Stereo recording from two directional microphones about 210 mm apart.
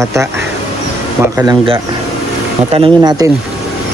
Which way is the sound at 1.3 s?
15° right (ahead or behind).